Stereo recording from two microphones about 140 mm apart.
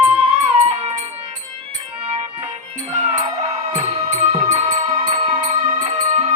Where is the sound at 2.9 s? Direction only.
55° right (ahead or behind).